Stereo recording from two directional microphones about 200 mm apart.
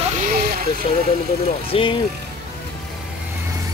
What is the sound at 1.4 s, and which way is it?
Speech, 25° left (ahead or behind).